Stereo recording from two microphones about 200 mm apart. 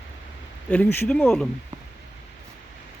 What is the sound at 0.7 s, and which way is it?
Speech, 10° left (ahead or behind).